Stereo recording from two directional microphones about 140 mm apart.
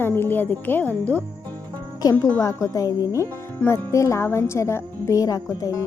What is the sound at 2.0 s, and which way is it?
A woman's voice, 25° left (ahead or behind).